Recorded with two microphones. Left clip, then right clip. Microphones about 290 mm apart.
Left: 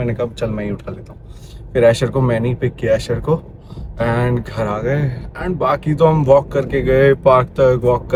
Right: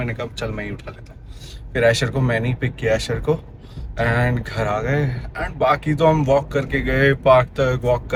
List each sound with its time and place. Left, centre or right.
0.0 s speech: centre